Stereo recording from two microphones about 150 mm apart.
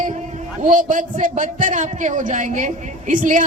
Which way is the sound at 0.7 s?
60° right (ahead or behind).